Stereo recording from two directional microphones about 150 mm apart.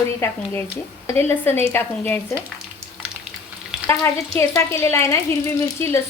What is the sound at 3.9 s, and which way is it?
Speech, 20° left (ahead or behind).